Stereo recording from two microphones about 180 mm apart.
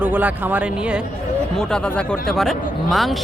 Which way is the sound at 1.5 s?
5° left (ahead or behind).